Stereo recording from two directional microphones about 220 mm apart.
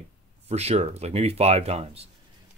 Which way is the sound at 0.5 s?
30° right (ahead or behind).